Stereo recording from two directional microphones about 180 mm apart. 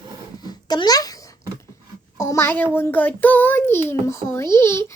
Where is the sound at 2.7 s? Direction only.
10° left (ahead or behind).